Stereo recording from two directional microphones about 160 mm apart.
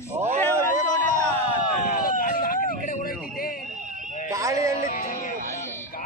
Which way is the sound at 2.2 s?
60° left (ahead or behind).